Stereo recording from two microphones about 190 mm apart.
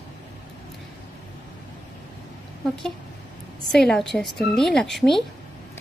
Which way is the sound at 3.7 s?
5° left (ahead or behind).